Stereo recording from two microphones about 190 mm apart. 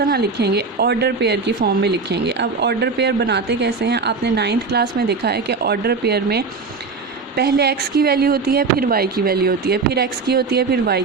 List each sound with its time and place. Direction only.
0.0 s speech: 55° right (ahead or behind)